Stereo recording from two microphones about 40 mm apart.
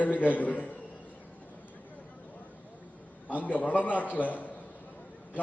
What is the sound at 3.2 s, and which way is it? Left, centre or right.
A man's voice, left.